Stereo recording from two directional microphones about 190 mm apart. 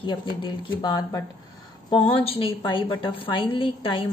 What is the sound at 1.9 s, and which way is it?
A woman's voice, 30° left (ahead or behind).